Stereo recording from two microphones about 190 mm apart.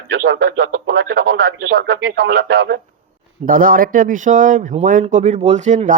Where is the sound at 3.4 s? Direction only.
45° right (ahead or behind).